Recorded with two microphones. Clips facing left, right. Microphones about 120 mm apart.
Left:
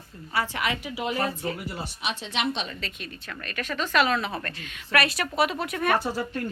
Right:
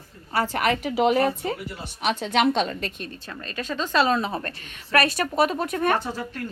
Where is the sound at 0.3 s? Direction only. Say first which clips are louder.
Right 5 dB; 45° right (ahead or behind); by 1.3 s 65° right (ahead or behind).